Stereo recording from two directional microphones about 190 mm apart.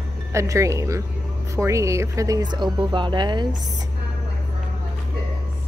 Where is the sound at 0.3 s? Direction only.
15° right (ahead or behind).